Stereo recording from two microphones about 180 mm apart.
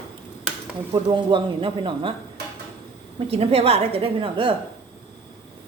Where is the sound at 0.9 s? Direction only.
30° right (ahead or behind).